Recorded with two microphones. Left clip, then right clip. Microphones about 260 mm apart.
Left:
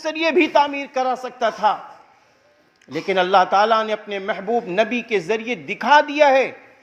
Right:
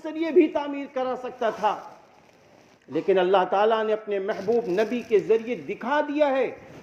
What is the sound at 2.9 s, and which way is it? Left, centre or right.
A man's voice, left.